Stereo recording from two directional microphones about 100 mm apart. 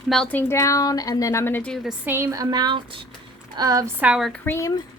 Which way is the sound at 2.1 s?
25° right (ahead or behind).